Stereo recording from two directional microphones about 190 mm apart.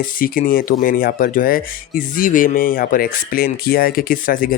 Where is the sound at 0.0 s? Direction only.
50° left (ahead or behind).